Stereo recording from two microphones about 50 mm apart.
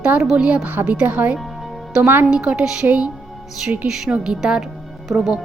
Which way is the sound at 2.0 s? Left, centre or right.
Right.